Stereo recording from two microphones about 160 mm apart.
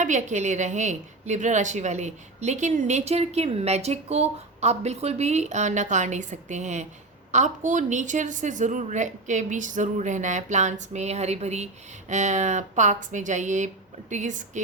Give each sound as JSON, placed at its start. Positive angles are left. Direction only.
{"t": 0.0, "sound": "a woman's voice", "side_deg": -50}